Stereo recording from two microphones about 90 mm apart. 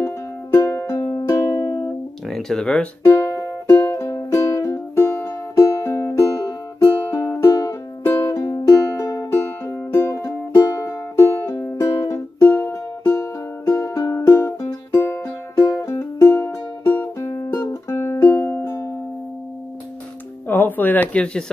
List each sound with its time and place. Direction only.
0.0 s music: 35° left (ahead or behind)
1.5 s music: 45° left (ahead or behind)
2.2 s speech: 5° left (ahead or behind)
3.2 s music: 35° left (ahead or behind)
8.0 s music: 25° left (ahead or behind)
20.4 s a sound: 25° left (ahead or behind)